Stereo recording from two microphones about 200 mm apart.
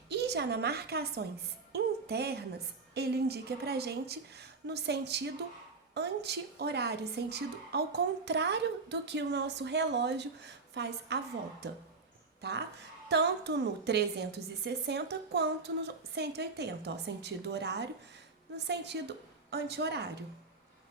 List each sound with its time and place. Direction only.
0.1 s a woman's voice: 55° right (ahead or behind)
12.4 s a woman's voice: 55° right (ahead or behind)